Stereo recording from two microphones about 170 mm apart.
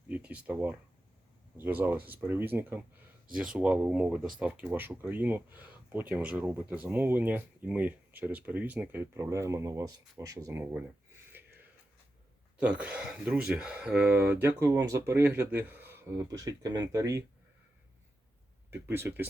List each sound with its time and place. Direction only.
0.1 s speech: 10° right (ahead or behind)
11.3 s a sound: 10° right (ahead or behind)
12.5 s speech: 5° right (ahead or behind)
18.7 s speech: 15° right (ahead or behind)